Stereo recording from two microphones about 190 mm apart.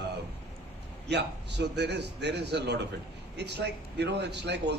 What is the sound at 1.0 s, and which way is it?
A man's voice, 60° right (ahead or behind).